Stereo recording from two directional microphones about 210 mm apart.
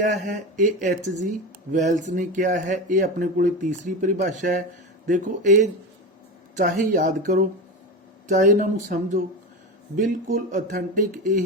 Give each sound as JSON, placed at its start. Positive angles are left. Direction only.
{"t": 0.0, "sound": "speech", "side_deg": -35}